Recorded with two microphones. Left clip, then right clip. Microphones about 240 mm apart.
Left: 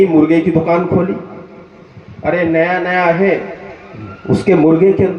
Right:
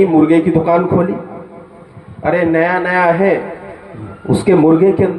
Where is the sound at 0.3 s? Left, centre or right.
Centre.